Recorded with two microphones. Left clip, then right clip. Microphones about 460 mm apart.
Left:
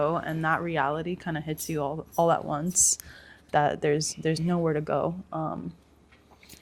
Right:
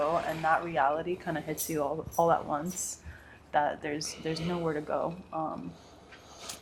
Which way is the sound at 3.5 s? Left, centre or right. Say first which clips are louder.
Left 5 dB; left.